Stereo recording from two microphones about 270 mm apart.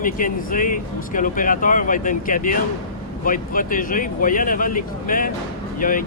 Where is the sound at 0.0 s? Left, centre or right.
Left.